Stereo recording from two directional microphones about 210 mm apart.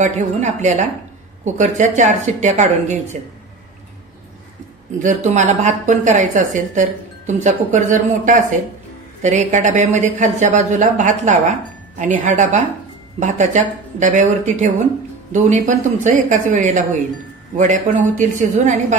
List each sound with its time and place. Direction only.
0.0 s a woman's voice: 35° right (ahead or behind)
4.9 s a woman's voice: 35° right (ahead or behind)